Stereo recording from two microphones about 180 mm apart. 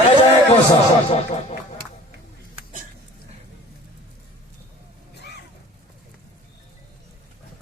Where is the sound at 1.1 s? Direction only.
35° left (ahead or behind).